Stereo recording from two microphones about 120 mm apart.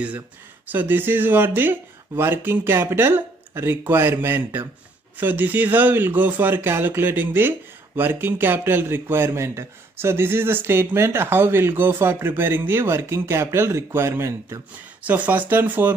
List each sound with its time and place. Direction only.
0.7 s speech: 15° right (ahead or behind)